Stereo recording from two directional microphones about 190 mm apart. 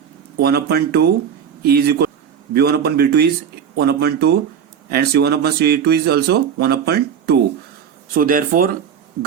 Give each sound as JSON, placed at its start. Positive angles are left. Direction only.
{"t": 0.3, "sound": "speech", "side_deg": -55}